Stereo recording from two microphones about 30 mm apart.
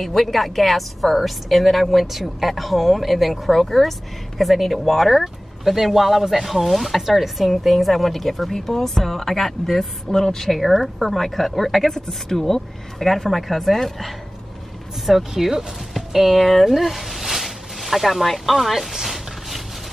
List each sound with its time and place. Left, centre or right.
0.0 s a woman's voice: centre
10.0 s speech: centre
10.4 s a woman's voice: centre
15.0 s speech: centre
19.0 s a sound: centre